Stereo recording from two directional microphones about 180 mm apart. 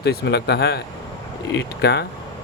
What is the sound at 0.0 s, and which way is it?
Speech, 65° left (ahead or behind).